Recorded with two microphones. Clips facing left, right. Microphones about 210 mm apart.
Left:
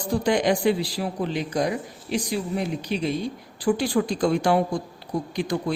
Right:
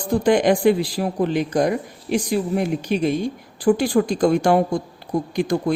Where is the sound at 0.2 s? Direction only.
50° right (ahead or behind).